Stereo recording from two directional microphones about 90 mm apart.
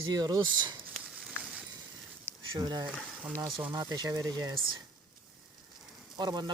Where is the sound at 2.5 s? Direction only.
50° right (ahead or behind).